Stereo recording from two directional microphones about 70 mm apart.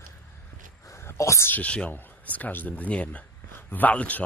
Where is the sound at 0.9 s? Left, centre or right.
Left.